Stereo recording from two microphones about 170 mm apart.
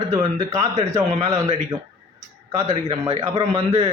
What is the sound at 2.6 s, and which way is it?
Speech, 35° right (ahead or behind).